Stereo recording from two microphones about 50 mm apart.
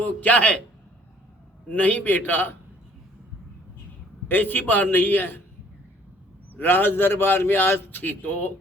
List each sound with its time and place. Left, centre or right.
0.0 s a man's voice: left
1.7 s a man's voice: left
4.3 s a man's voice: left
6.6 s a man's voice: left